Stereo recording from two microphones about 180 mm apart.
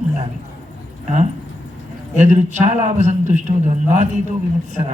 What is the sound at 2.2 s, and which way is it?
A man's voice, 40° right (ahead or behind).